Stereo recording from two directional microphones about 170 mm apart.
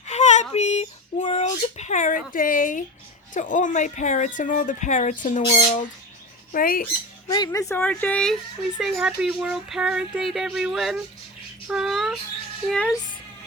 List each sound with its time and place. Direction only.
0.1 s whimper: 45° left (ahead or behind)
0.5 s a sound: 40° left (ahead or behind)
3.3 s speech: 50° left (ahead or behind)
7.3 s speech: 20° left (ahead or behind); by 13.0 s centre (ahead or behind)